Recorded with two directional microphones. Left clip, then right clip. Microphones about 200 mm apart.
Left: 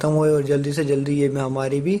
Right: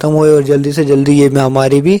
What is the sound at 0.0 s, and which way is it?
Speech, 35° right (ahead or behind).